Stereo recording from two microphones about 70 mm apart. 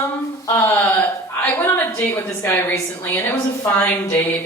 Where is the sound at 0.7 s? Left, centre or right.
Left.